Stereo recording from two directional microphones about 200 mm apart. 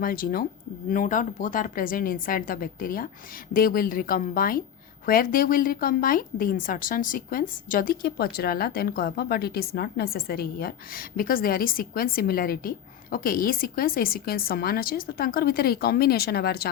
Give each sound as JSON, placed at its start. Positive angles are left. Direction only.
{"t": 0.0, "sound": "a woman's voice", "side_deg": 45}